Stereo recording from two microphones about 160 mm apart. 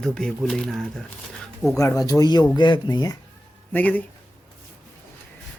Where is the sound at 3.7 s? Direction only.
10° left (ahead or behind).